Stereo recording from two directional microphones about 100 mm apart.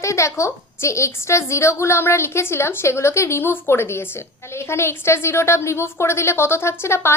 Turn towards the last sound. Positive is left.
turn(degrees=25)  # may be behind; listen again after turning